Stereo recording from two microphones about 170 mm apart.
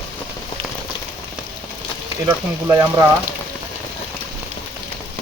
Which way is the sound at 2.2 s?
20° right (ahead or behind).